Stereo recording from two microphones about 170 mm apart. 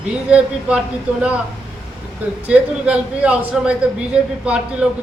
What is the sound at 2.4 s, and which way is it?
A man's voice, 10° right (ahead or behind).